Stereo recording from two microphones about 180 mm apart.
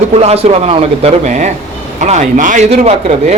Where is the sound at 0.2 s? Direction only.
35° right (ahead or behind).